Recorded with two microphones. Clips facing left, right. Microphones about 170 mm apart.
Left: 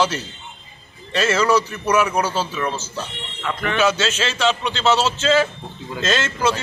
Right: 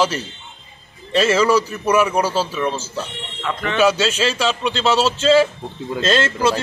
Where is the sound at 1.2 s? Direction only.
10° right (ahead or behind).